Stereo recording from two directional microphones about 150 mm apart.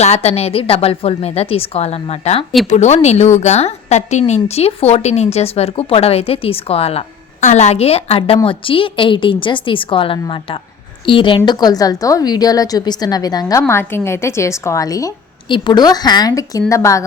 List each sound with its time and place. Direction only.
0.0 s a woman's voice: 45° left (ahead or behind); by 17.0 s 20° left (ahead or behind)